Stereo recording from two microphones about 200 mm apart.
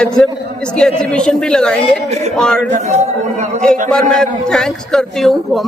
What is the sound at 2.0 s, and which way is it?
Speech, 35° right (ahead or behind).